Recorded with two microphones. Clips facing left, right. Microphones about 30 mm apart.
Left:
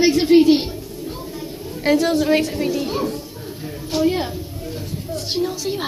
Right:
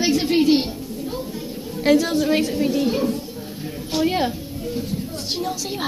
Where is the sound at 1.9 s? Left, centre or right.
Left.